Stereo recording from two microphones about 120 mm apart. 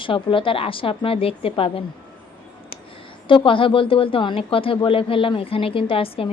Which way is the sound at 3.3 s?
45° left (ahead or behind).